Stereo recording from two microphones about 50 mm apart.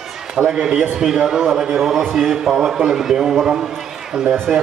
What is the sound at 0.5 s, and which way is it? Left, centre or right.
A man's voice, centre.